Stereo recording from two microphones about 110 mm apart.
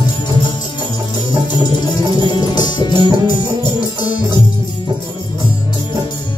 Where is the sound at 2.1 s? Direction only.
40° left (ahead or behind).